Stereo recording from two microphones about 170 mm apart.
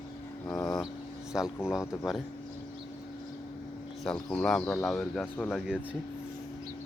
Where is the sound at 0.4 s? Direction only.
20° left (ahead or behind).